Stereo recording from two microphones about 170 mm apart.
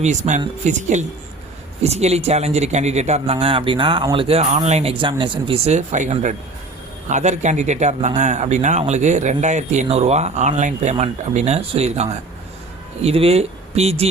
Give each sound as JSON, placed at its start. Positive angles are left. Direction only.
{"t": 0.0, "sound": "speech", "side_deg": -45}